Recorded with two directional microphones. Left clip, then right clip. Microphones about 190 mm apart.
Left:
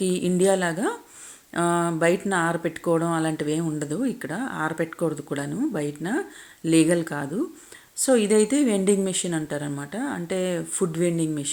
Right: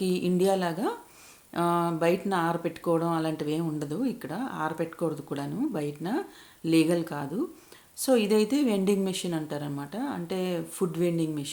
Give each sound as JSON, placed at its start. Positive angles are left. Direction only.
{"t": 0.0, "sound": "speech", "side_deg": 20}